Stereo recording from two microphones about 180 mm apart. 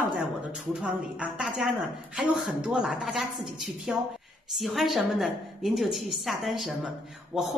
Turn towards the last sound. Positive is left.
turn(degrees=0)  # may be behind; listen again after turning